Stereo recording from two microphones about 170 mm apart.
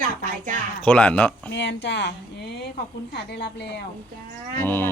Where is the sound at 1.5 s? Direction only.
90° left.